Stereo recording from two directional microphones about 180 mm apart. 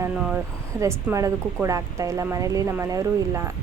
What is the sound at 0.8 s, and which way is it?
Speech, 15° right (ahead or behind).